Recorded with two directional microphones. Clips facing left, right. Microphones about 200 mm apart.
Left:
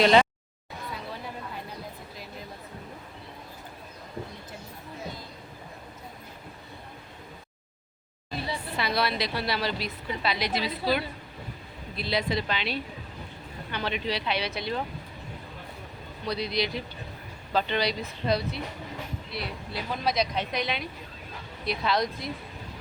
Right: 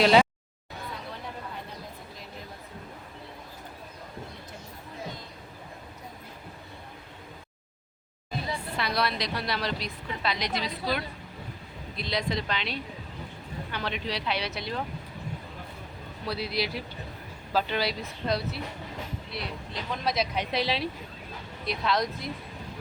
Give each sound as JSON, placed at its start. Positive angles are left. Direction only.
{"t": 0.0, "sound": "speech", "side_deg": -5}
{"t": 8.8, "sound": "a woman's voice", "side_deg": 0}
{"t": 16.2, "sound": "a woman's voice", "side_deg": -5}
{"t": 20.5, "sound": "a woman's voice", "side_deg": -30}
{"t": 21.7, "sound": "a woman's voice", "side_deg": 0}